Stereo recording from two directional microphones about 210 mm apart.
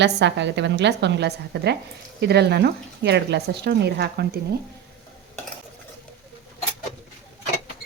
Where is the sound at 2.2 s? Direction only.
50° right (ahead or behind).